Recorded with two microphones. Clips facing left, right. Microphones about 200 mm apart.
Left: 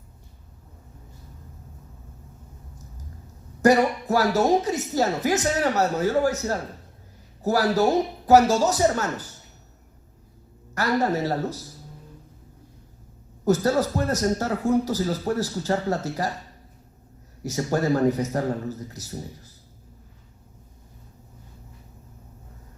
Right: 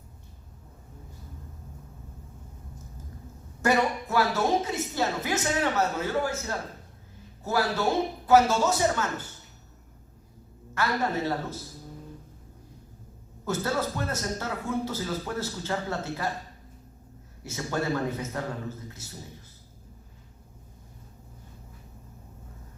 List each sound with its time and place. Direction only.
3.6 s speech: 40° left (ahead or behind)
10.8 s speech: 40° left (ahead or behind)
13.4 s speech: 40° left (ahead or behind)
17.4 s speech: 40° left (ahead or behind)